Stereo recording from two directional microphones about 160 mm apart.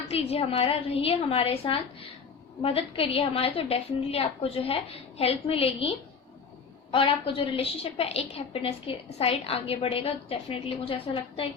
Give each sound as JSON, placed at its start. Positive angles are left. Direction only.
{"t": 0.1, "sound": "a woman's voice", "side_deg": 40}
{"t": 6.9, "sound": "a woman's voice", "side_deg": 35}